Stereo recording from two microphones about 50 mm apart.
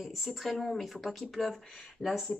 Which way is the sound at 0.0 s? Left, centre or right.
Centre.